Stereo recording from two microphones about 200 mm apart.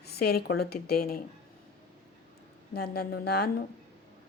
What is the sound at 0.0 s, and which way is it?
A woman's voice, 55° left (ahead or behind).